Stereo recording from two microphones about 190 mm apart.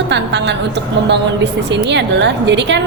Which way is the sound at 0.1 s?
65° right (ahead or behind).